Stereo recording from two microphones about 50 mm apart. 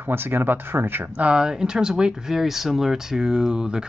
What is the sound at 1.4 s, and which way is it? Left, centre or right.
Speech, centre.